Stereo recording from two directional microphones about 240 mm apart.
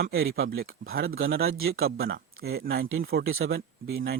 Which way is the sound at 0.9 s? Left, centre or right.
Right.